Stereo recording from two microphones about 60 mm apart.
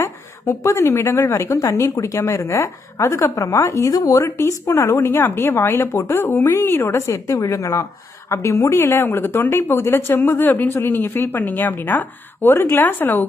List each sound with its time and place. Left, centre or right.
0.6 s speech: left
5.0 s speech: left
5.9 s a woman's voice: left